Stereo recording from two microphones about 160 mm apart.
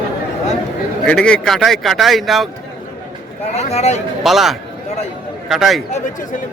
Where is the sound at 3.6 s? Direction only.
40° left (ahead or behind).